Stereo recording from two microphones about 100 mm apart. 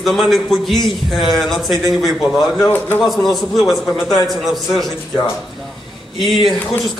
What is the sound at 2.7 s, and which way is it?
Speech, 20° left (ahead or behind).